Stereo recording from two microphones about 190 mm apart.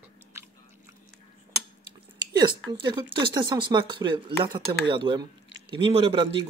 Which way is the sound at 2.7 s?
25° right (ahead or behind).